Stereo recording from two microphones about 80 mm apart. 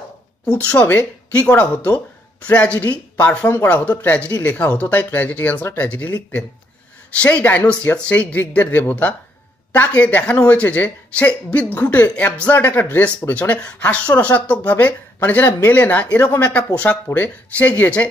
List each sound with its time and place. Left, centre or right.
0.7 s speech: centre